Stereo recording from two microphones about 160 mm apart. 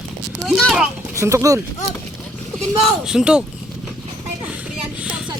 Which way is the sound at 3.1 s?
5° right (ahead or behind).